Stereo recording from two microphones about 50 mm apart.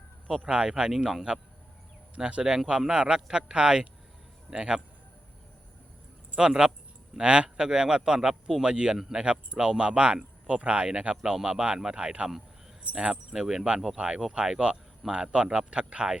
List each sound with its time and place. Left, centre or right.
0.7 s a man's voice: centre
2.1 s a man's voice: centre
6.3 s a man's voice: centre
9.0 s a man's voice: centre
9.2 s a man's voice: right
13.4 s a man's voice: centre